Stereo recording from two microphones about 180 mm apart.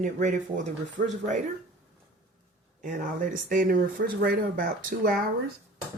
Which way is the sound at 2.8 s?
45° right (ahead or behind).